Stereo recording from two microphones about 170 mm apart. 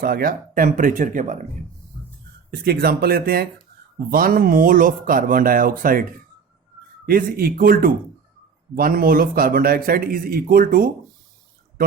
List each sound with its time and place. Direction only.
0.0 s speech: 60° right (ahead or behind)
2.5 s a man's voice: 65° right (ahead or behind)